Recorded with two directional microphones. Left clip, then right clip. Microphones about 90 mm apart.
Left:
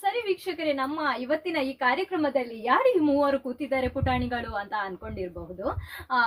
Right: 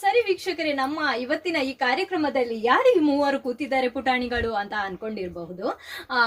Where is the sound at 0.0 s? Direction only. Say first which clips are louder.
Right 6 dB; 25° right (ahead or behind).